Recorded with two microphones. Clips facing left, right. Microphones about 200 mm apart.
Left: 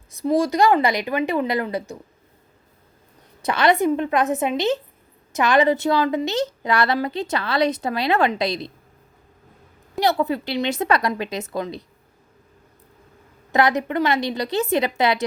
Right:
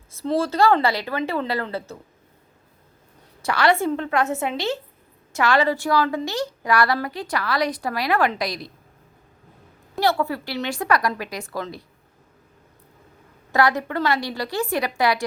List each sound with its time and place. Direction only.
0.1 s a woman's voice: 15° left (ahead or behind)
3.4 s a woman's voice: 20° left (ahead or behind)
10.0 s a woman's voice: 20° left (ahead or behind)
13.5 s a woman's voice: 20° left (ahead or behind)